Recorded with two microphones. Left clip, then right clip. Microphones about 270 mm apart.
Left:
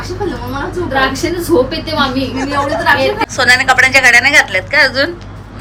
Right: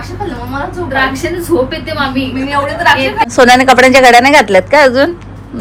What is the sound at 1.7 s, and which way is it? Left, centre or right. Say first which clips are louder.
Speech: even; centre.